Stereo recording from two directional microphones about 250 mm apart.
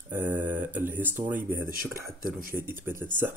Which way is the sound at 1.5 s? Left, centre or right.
Right.